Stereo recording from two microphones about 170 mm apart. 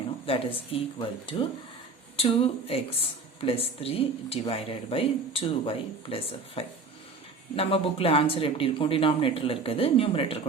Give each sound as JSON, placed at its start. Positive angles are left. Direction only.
{"t": 0.3, "sound": "speech", "side_deg": 35}